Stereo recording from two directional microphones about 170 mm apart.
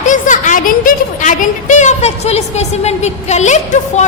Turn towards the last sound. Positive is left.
turn(degrees=45)  # may be behind; listen again after turning